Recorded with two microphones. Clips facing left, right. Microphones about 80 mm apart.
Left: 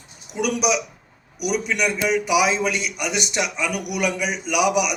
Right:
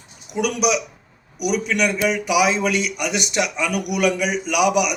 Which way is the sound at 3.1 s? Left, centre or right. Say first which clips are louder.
Right 1 dB; centre.